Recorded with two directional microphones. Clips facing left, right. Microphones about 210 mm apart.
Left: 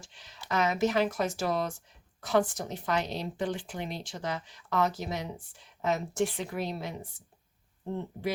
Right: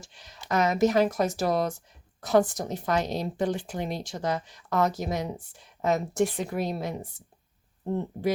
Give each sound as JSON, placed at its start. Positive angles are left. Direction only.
{"t": 0.0, "sound": "a woman's voice", "side_deg": -40}